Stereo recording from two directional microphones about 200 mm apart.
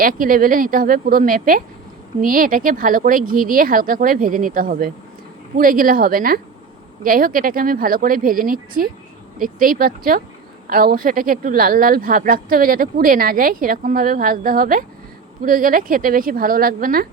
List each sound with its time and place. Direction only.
0.0 s speech: 45° right (ahead or behind)